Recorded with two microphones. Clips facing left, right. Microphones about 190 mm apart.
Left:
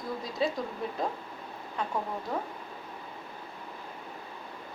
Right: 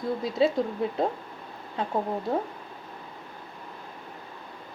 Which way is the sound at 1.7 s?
30° right (ahead or behind).